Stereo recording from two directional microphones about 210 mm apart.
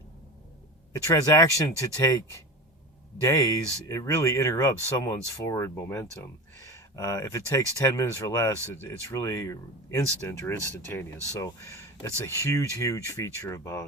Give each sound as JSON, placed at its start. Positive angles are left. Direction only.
{"t": 1.1, "sound": "speech", "side_deg": 15}
{"t": 3.2, "sound": "speech", "side_deg": 15}